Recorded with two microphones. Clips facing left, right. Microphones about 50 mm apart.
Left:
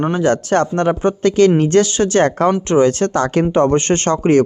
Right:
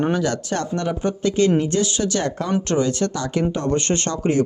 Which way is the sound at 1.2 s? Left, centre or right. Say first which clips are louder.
Left 7 dB; left.